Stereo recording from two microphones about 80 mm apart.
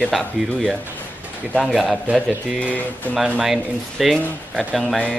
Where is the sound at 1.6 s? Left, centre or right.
Centre.